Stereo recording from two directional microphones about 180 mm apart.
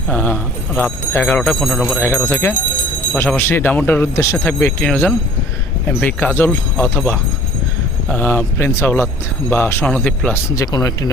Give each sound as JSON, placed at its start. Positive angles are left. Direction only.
{"t": 0.1, "sound": "speech", "side_deg": 10}
{"t": 10.5, "sound": "speech", "side_deg": 20}